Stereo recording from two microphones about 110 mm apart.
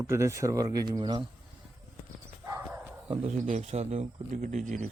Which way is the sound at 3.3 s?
90° right.